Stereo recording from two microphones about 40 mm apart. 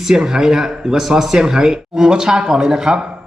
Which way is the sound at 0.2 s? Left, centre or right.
Centre.